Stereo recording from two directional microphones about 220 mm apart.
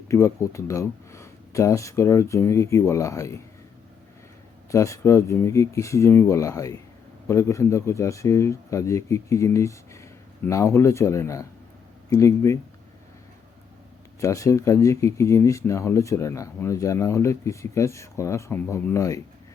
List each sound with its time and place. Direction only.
0.1 s speech: 15° left (ahead or behind)
4.7 s speech: 15° left (ahead or behind)
14.2 s speech: 15° left (ahead or behind)